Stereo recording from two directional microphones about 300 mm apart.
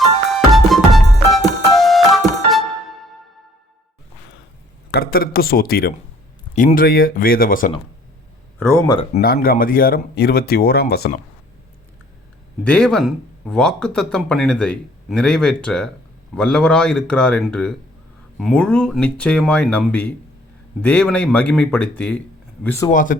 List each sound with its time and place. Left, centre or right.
0.3 s music: centre
4.9 s speech: left
8.9 s speech: centre
9.2 s speech: left
12.6 s speech: centre
22.9 s speech: left